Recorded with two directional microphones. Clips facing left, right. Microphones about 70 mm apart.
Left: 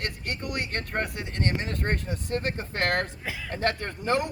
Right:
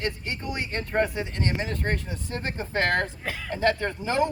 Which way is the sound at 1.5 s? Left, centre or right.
Left.